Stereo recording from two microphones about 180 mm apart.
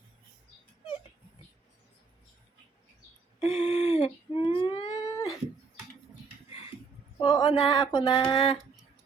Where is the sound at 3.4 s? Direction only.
40° left (ahead or behind).